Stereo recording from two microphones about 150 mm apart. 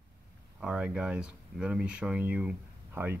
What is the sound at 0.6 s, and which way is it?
Speech, 5° right (ahead or behind).